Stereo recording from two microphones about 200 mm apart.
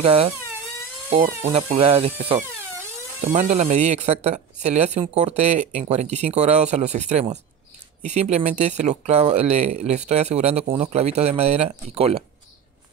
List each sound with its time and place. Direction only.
0.0 s speech: 30° right (ahead or behind)